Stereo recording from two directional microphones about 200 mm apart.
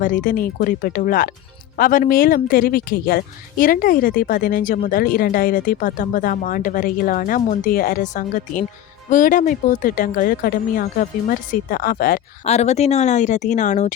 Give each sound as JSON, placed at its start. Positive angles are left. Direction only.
{"t": 0.0, "sound": "speech", "side_deg": 40}